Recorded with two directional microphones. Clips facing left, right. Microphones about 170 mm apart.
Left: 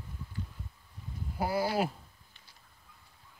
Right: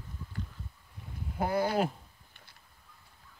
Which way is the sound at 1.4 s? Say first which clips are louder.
Right 1 dB; 5° left (ahead or behind).